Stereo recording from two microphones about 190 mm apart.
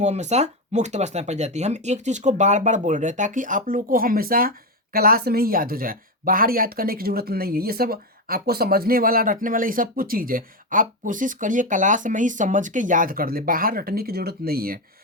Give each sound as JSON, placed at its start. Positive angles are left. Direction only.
{"t": 0.0, "sound": "speech", "side_deg": -35}